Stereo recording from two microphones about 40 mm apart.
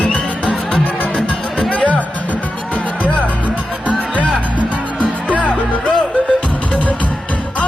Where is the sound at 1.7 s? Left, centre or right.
Left.